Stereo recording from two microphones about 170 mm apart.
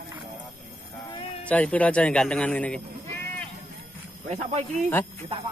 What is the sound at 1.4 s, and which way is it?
Speech, 10° left (ahead or behind).